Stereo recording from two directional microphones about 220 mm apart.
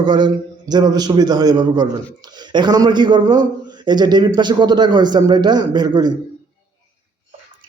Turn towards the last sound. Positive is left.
turn(degrees=-20)  # may be behind; listen again after turning